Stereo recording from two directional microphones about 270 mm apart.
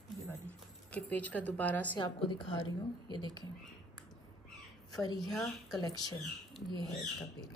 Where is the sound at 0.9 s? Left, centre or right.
Centre.